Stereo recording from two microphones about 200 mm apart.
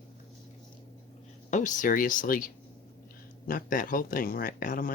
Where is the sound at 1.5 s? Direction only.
40° left (ahead or behind).